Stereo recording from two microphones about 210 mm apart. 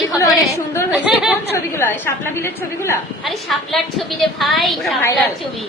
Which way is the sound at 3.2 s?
Centre (ahead or behind).